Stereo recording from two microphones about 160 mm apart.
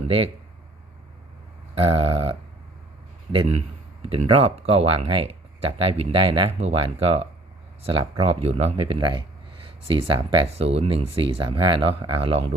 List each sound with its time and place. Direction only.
1.8 s speech: 35° right (ahead or behind)
3.3 s a man's voice: 45° right (ahead or behind)